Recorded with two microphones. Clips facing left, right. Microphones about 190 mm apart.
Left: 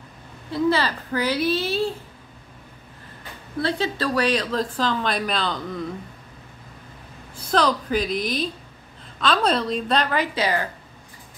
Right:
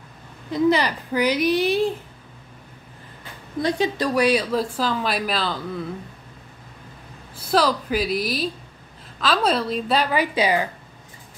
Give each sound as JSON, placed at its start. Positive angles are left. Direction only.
{"t": 0.5, "sound": "speech", "side_deg": -15}
{"t": 3.5, "sound": "speech", "side_deg": -15}
{"t": 7.4, "sound": "a woman's voice", "side_deg": -5}